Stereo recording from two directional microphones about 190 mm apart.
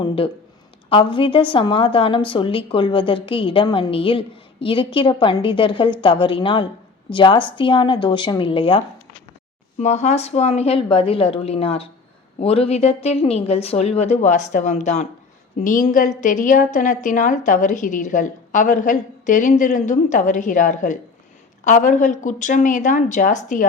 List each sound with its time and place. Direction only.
1.1 s a woman's voice: 25° left (ahead or behind)
9.8 s a woman's voice: 35° left (ahead or behind)